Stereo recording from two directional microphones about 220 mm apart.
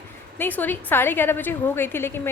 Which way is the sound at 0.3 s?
10° left (ahead or behind).